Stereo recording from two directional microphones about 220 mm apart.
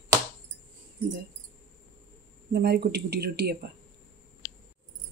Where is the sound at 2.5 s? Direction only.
45° right (ahead or behind).